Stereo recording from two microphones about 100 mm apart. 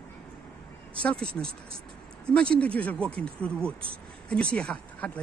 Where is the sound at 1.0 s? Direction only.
10° left (ahead or behind).